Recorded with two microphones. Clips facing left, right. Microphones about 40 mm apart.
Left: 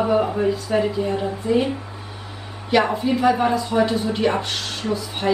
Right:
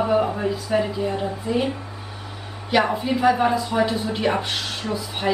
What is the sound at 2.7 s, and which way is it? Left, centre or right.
A woman's voice, centre.